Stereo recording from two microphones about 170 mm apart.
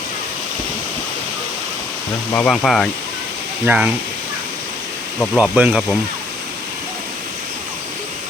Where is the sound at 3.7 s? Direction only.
10° right (ahead or behind).